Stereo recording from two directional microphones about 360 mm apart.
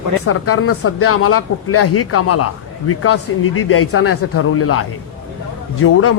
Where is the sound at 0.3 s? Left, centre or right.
Left.